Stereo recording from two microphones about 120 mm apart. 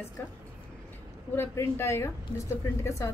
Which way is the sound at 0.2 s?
15° left (ahead or behind).